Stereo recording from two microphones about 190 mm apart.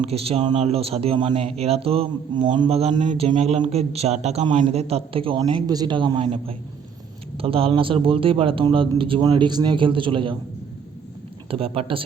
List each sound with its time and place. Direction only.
0.0 s speech: 30° right (ahead or behind)
6.2 s a man's voice: 40° right (ahead or behind)
11.4 s a man's voice: 30° right (ahead or behind)